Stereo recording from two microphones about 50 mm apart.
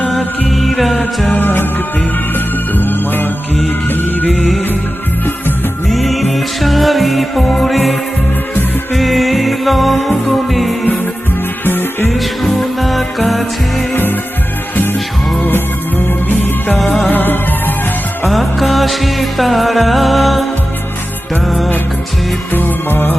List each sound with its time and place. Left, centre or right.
0.1 s music: centre
1.4 s music: left
4.3 s music: centre
5.9 s music: centre
9.0 s music: centre
11.6 s music: left
12.1 s music: centre
13.9 s music: left
15.4 s music: left
16.7 s music: centre
17.1 s music: left
18.3 s music: centre
21.4 s music: centre
22.5 s music: left